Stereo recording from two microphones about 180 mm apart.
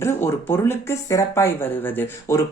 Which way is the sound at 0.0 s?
15° left (ahead or behind).